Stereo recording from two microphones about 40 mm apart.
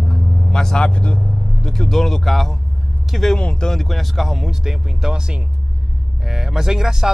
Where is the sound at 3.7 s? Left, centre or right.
Centre.